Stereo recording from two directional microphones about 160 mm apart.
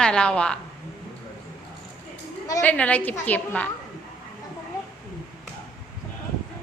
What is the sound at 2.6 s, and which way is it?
A woman's voice, 10° left (ahead or behind).